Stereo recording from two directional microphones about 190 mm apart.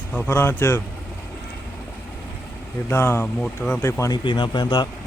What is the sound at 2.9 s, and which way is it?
Speech, 10° left (ahead or behind).